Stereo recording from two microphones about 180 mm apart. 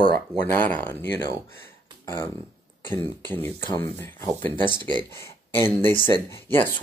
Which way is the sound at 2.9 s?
10° left (ahead or behind).